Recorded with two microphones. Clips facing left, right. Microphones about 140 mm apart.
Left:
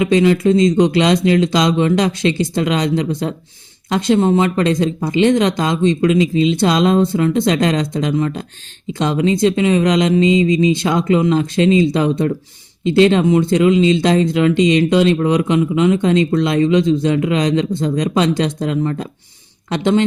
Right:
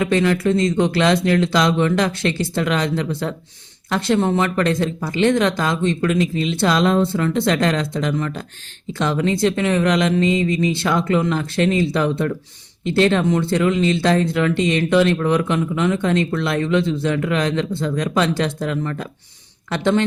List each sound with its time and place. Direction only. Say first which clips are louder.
0.0 s speech: left 5 dB; 15° left (ahead or behind)